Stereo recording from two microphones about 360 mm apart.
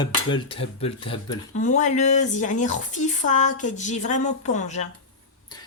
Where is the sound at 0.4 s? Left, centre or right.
Centre.